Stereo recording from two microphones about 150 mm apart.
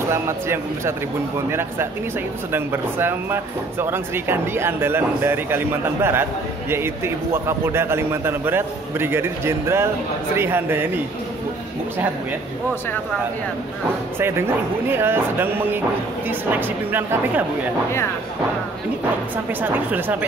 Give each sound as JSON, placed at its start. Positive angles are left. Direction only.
{"t": 0.1, "sound": "speech", "side_deg": -15}
{"t": 7.4, "sound": "speech", "side_deg": -15}
{"t": 14.1, "sound": "speech", "side_deg": -15}
{"t": 19.6, "sound": "speech", "side_deg": -10}